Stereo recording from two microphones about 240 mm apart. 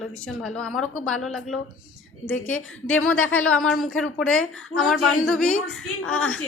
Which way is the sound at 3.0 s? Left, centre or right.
Left.